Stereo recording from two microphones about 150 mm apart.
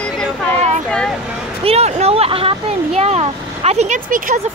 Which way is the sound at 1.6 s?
45° right (ahead or behind).